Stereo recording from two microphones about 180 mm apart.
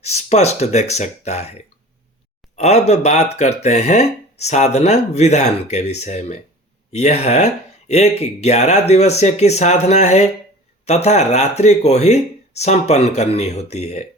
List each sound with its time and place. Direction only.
0.0 s speech: 35° left (ahead or behind)